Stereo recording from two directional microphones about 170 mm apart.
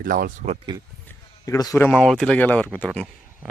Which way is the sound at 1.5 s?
20° left (ahead or behind).